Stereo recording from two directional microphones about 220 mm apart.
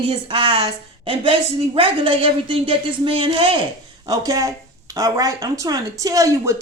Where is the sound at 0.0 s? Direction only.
25° right (ahead or behind).